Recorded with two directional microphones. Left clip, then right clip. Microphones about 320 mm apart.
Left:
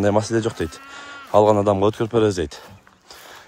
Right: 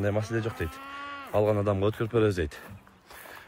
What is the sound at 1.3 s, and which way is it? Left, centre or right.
Speech, centre.